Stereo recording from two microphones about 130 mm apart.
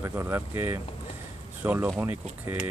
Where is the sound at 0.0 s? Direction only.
15° right (ahead or behind).